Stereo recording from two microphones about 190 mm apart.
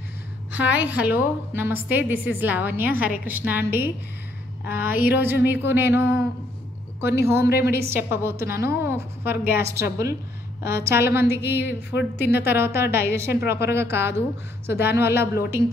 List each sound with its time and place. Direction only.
0.5 s a woman's voice: 10° right (ahead or behind)
7.4 s a woman's voice: 60° left (ahead or behind)
7.9 s a woman's voice: 15° right (ahead or behind)
11.6 s a woman's voice: 65° left (ahead or behind)
12.2 s a woman's voice: 10° right (ahead or behind)